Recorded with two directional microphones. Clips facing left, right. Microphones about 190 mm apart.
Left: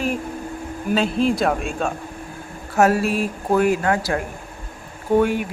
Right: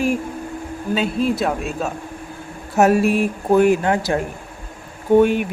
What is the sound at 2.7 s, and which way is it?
Speech, 20° right (ahead or behind).